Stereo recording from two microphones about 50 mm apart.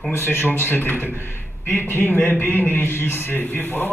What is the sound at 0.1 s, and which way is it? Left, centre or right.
A man's voice, left.